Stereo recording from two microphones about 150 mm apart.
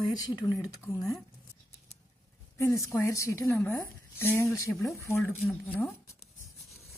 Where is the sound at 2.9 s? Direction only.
20° left (ahead or behind).